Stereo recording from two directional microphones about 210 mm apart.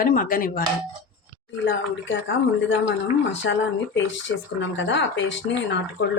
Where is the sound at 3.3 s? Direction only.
60° left (ahead or behind).